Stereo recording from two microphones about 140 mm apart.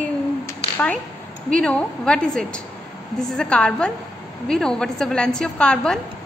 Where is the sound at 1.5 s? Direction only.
5° left (ahead or behind).